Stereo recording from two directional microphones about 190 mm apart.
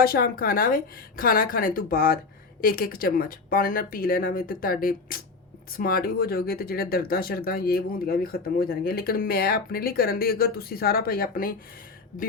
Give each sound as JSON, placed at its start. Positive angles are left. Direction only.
{"t": 0.0, "sound": "speech", "side_deg": 50}